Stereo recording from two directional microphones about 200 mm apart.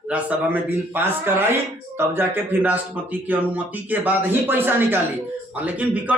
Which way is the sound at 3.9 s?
10° right (ahead or behind).